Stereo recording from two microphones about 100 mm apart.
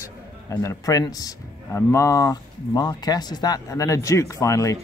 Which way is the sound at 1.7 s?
25° left (ahead or behind).